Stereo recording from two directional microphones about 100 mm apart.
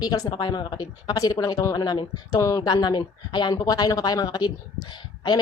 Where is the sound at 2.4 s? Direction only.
35° left (ahead or behind).